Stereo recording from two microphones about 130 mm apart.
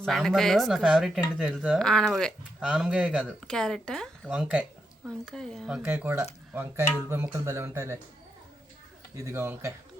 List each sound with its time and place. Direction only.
0.0 s speech: centre (ahead or behind)
3.4 s speech: 5° left (ahead or behind)
4.3 s speech: 10° right (ahead or behind)
5.0 s speech: 5° left (ahead or behind)
5.6 s speech: 10° right (ahead or behind)
9.1 s speech: 20° right (ahead or behind)